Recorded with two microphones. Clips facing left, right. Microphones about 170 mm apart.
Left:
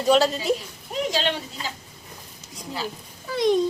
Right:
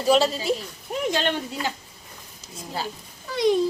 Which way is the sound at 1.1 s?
55° right (ahead or behind).